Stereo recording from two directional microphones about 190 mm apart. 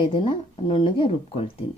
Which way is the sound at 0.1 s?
25° left (ahead or behind).